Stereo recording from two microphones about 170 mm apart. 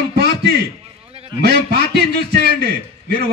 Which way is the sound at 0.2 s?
75° right (ahead or behind).